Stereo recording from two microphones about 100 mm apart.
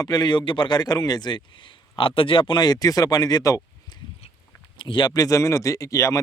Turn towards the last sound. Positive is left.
turn(degrees=35)  # may be behind; listen again after turning